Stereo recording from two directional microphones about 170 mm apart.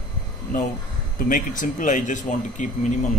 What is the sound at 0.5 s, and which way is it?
Speech, 50° left (ahead or behind).